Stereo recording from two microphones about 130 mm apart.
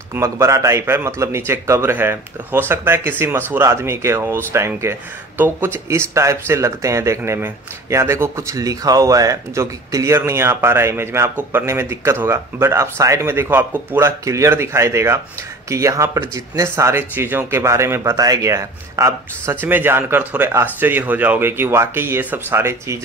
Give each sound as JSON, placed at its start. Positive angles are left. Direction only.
{"t": 0.1, "sound": "speech", "side_deg": -20}